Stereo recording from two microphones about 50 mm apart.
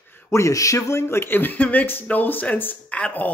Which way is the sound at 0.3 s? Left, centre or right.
Left.